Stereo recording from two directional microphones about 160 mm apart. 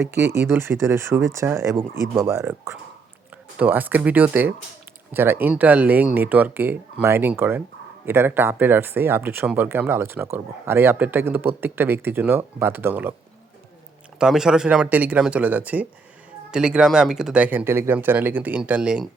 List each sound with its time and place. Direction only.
0.0 s speech: 15° right (ahead or behind)
14.2 s speech: 5° right (ahead or behind)